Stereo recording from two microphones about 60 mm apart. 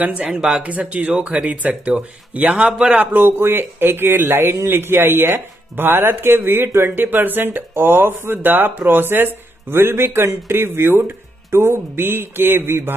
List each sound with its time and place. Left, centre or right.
0.4 s speech: centre
0.7 s speech: right
3.0 s speech: right